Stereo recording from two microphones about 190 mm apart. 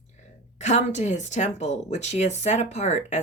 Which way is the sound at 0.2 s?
40° left (ahead or behind).